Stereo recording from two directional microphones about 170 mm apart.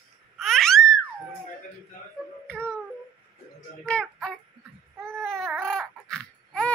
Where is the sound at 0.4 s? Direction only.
Centre (ahead or behind).